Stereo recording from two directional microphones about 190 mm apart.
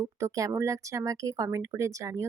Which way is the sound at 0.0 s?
15° right (ahead or behind).